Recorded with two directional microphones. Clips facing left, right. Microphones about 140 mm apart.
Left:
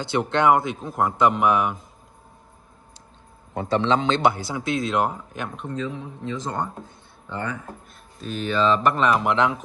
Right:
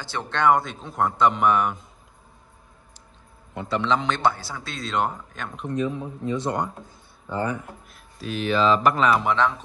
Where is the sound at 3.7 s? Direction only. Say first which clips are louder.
Left 3 dB; 25° left (ahead or behind).